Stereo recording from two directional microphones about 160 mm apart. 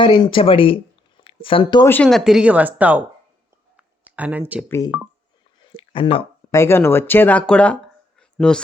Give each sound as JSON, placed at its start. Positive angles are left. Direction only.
{"t": 0.0, "sound": "speech", "side_deg": 30}
{"t": 1.8, "sound": "speech", "side_deg": 10}
{"t": 2.0, "sound": "speech", "side_deg": 0}
{"t": 3.8, "sound": "a sound", "side_deg": -10}
{"t": 5.7, "sound": "a sound", "side_deg": 35}
{"t": 6.5, "sound": "speech", "side_deg": 15}